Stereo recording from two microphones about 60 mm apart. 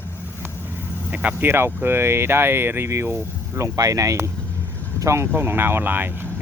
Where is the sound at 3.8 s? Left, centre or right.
Right.